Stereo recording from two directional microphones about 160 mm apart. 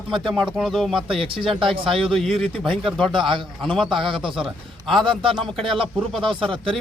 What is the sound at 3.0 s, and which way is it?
Speech, 30° right (ahead or behind).